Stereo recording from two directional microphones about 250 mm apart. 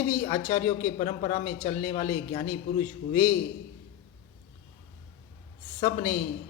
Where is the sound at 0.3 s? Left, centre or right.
Centre.